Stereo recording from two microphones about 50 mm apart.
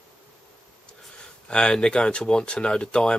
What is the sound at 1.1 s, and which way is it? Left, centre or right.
Speech, centre.